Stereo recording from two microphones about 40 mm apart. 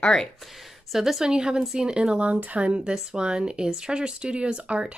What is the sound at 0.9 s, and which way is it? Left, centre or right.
Speech, centre.